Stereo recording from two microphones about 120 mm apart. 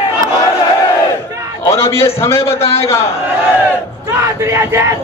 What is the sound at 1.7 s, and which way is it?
A man's voice, 20° left (ahead or behind).